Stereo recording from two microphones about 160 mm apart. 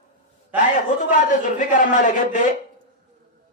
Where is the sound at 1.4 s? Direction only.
50° left (ahead or behind).